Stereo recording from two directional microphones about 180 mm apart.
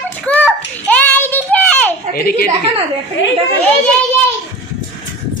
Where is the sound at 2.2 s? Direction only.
55° left (ahead or behind).